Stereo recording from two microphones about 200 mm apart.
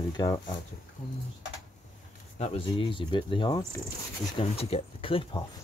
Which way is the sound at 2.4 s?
25° left (ahead or behind).